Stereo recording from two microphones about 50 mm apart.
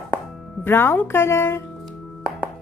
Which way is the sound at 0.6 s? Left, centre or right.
Left.